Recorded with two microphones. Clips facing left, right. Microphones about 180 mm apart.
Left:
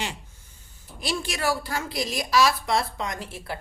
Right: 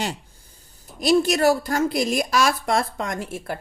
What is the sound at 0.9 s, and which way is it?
A woman's voice, 45° right (ahead or behind).